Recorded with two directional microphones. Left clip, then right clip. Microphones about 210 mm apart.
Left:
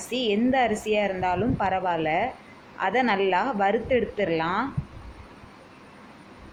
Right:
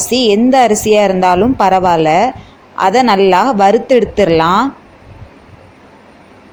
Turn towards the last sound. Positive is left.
turn(degrees=-45)  # may be behind; listen again after turning